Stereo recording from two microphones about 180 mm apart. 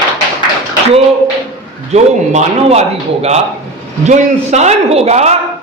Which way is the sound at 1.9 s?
35° right (ahead or behind).